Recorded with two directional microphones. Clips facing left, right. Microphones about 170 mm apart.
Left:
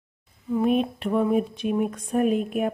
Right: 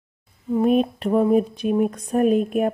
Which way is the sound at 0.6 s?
40° right (ahead or behind).